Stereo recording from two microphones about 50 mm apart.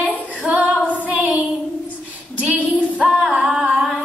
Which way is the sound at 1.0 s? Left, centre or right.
Right.